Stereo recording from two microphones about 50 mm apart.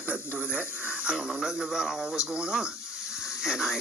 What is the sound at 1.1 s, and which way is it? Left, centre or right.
Speech, centre.